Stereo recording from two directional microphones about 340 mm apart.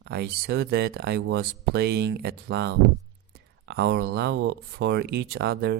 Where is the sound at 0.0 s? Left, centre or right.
Right.